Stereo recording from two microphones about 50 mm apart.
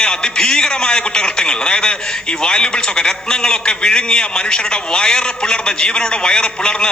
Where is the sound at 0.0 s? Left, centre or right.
Centre.